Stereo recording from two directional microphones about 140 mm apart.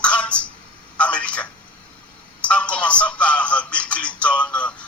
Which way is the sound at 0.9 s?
10° left (ahead or behind).